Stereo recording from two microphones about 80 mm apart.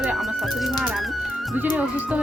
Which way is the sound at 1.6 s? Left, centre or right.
Right.